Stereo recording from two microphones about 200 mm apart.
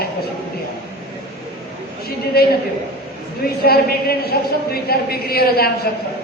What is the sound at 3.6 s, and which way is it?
A woman's voice, 50° left (ahead or behind).